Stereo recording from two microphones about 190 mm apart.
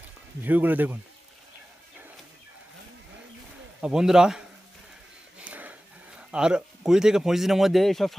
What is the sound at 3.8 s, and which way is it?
Speech, 5° right (ahead or behind).